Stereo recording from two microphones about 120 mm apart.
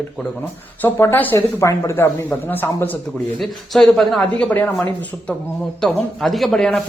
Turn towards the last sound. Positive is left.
turn(degrees=0)  # may be behind; listen again after turning